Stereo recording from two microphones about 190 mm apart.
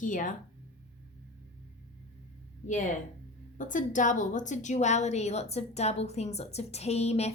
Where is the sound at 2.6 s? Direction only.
40° left (ahead or behind).